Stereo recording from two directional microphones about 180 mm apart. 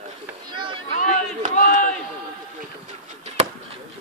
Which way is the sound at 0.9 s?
45° left (ahead or behind).